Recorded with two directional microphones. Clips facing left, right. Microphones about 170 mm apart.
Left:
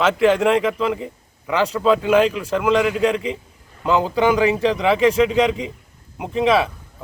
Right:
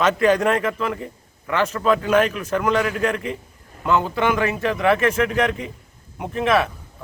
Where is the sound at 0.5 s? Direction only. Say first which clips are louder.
Left 4 dB; 10° left (ahead or behind).